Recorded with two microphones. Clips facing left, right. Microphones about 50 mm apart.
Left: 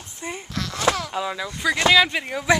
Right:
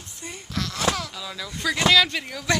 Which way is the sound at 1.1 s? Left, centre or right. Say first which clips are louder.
Left 9 dB; left.